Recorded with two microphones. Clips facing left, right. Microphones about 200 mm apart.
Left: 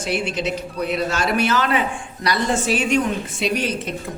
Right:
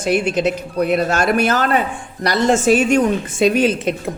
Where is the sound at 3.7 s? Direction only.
90° right.